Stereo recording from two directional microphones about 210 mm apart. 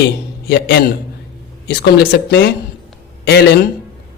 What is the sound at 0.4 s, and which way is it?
A man's voice, 55° left (ahead or behind).